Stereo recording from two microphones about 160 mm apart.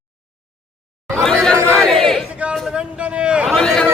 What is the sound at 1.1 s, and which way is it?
Chatter, 5° left (ahead or behind).